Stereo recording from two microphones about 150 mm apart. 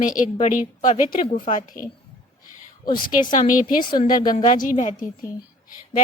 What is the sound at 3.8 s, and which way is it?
Speech, 30° left (ahead or behind).